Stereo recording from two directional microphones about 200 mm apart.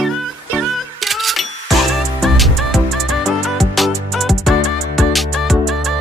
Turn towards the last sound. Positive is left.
turn(degrees=0)  # may be behind; listen again after turning